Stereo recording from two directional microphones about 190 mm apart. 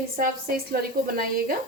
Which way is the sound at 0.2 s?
50° right (ahead or behind).